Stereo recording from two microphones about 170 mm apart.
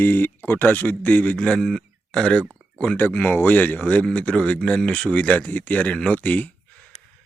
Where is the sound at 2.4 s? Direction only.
15° right (ahead or behind).